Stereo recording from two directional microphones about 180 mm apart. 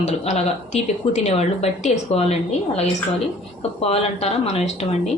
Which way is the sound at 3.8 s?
35° left (ahead or behind).